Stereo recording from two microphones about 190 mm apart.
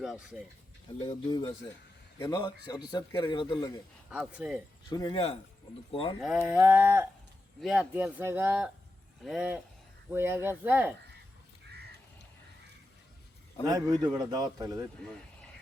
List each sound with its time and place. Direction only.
0.0 s speech: centre (ahead or behind)
1.0 s a man's voice: 25° left (ahead or behind)
4.1 s a sound: 5° right (ahead or behind)
4.9 s a man's voice: 20° left (ahead or behind)
6.2 s a sound: 5° right (ahead or behind)
7.6 s speech: 5° right (ahead or behind)
10.1 s a sound: 10° right (ahead or behind)
13.7 s a man's voice: 20° right (ahead or behind)
15.0 s speech: 5° left (ahead or behind)